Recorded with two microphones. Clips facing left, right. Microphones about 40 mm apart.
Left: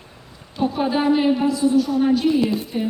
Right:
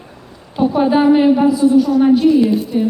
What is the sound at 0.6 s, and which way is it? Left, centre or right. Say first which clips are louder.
A woman's voice: right 7 dB; centre.